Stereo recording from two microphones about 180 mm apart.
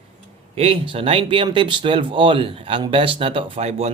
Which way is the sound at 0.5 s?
30° right (ahead or behind).